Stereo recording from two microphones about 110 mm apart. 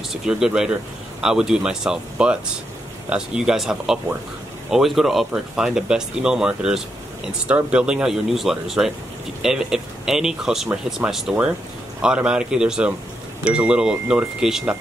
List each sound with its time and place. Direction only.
0.1 s speech: 5° right (ahead or behind)